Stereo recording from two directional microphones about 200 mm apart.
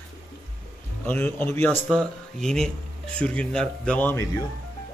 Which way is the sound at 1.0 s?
10° left (ahead or behind).